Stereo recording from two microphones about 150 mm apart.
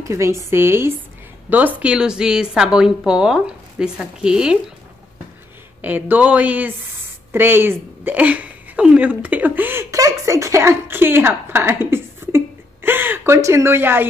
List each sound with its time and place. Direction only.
0.1 s a woman's voice: 20° right (ahead or behind)
5.8 s a woman's voice: 10° right (ahead or behind)